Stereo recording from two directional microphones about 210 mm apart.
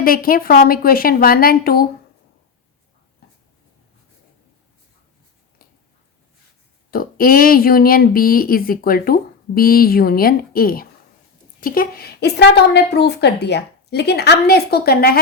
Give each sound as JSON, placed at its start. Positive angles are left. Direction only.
{"t": 0.0, "sound": "speech", "side_deg": 45}
{"t": 6.9, "sound": "speech", "side_deg": 45}